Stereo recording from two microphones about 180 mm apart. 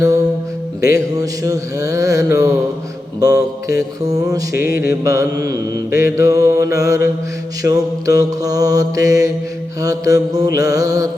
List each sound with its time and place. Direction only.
0.8 s mantra: 20° right (ahead or behind)